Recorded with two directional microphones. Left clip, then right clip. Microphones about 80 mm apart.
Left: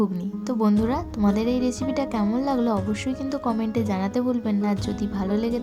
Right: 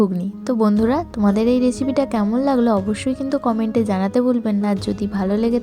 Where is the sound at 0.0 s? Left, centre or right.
Right.